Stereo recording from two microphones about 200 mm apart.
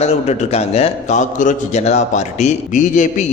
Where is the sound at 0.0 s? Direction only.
30° left (ahead or behind).